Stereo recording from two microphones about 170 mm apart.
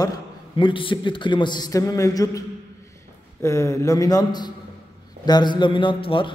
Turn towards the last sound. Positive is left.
turn(degrees=30)  # may be behind; listen again after turning